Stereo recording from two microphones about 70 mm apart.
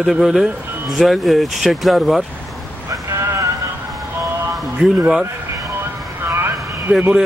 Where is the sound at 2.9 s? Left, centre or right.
Right.